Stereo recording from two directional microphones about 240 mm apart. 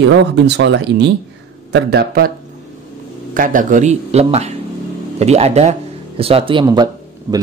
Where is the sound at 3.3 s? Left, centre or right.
Right.